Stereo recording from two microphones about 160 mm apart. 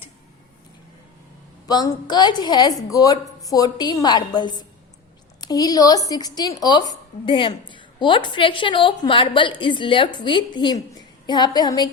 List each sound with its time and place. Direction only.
1.6 s a woman's voice: 25° left (ahead or behind)